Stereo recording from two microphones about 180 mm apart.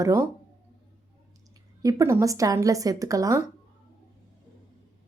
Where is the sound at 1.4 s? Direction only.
20° right (ahead or behind).